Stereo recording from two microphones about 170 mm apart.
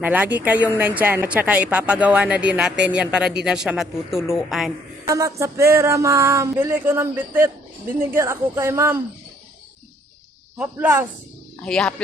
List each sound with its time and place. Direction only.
0.0 s a woman's voice: 10° right (ahead or behind)
5.0 s a woman's voice: 20° right (ahead or behind)
10.6 s a woman's voice: 10° right (ahead or behind)
11.6 s speech: 5° left (ahead or behind)